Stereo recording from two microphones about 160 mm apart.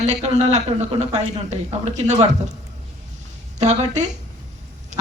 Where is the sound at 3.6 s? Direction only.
45° right (ahead or behind).